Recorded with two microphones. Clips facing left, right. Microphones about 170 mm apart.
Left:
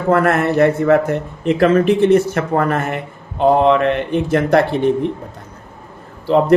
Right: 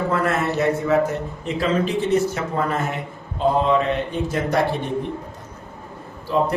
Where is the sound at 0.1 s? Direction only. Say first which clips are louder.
Left 7 dB; 60° left (ahead or behind).